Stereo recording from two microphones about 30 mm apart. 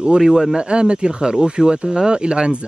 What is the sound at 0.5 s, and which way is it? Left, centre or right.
Speech, right.